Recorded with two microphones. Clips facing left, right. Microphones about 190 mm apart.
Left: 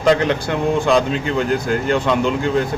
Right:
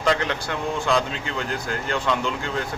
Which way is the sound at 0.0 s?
20° left (ahead or behind).